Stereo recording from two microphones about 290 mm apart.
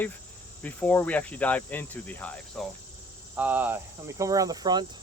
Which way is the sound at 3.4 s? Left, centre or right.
Centre.